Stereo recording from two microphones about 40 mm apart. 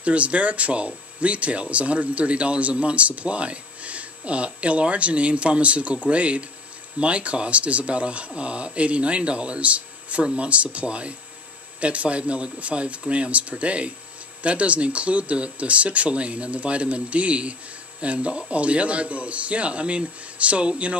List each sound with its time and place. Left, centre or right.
0.0 s speech: right